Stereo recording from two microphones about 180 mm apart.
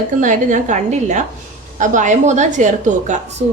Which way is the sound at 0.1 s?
45° right (ahead or behind).